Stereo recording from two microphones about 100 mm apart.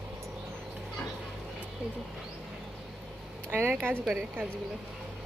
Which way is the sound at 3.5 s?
20° right (ahead or behind).